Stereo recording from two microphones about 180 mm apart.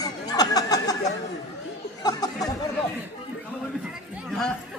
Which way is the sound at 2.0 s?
20° left (ahead or behind).